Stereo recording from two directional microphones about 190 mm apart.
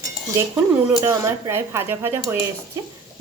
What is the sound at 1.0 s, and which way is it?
Speech, 15° right (ahead or behind).